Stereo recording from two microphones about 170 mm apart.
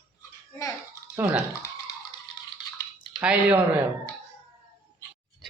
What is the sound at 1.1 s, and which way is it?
Speech, 10° right (ahead or behind).